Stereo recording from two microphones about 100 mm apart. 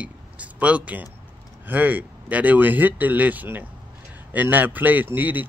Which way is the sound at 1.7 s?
15° right (ahead or behind).